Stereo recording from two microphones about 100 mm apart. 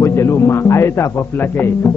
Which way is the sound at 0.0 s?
30° left (ahead or behind).